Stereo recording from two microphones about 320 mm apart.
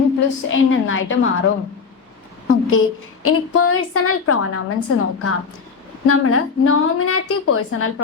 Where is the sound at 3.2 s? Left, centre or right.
Left.